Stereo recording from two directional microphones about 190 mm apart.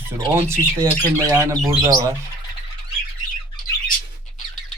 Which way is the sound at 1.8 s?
15° right (ahead or behind).